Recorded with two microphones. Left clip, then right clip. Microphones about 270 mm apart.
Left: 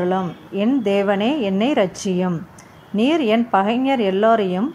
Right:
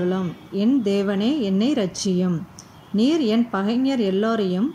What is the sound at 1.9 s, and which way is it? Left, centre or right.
A woman's voice, left.